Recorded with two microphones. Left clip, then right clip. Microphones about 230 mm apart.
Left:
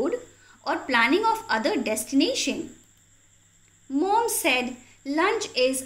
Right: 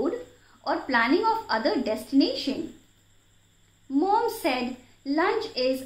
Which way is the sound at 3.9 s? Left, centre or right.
Left.